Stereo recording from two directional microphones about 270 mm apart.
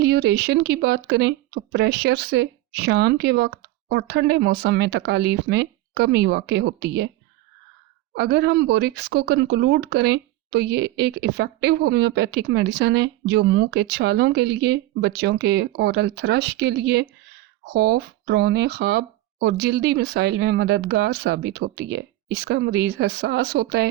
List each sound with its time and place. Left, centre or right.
0.0 s speech: right
8.1 s speech: right